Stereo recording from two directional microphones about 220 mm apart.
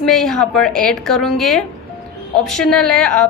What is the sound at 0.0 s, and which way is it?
A woman's voice, centre (ahead or behind).